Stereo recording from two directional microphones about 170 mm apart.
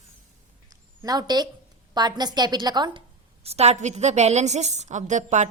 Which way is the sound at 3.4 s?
40° right (ahead or behind).